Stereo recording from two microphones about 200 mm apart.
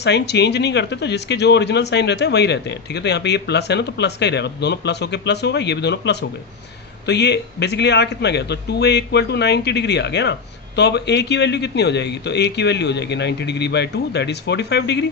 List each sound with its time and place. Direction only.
0.0 s speech: 60° left (ahead or behind)